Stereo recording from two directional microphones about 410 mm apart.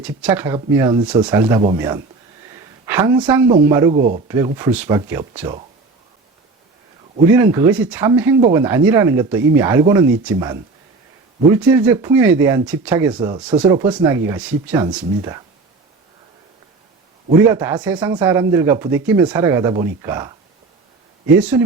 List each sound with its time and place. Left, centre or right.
0.0 s speech: centre
3.9 s speech: right
4.3 s speech: centre
7.3 s speech: centre
11.6 s speech: centre
17.4 s speech: centre